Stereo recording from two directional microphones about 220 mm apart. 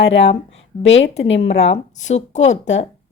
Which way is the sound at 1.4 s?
30° left (ahead or behind).